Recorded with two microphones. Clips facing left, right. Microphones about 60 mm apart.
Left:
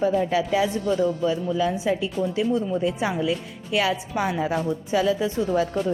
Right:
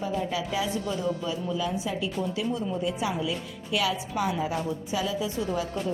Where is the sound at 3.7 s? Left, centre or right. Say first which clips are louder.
Left 4 dB; left.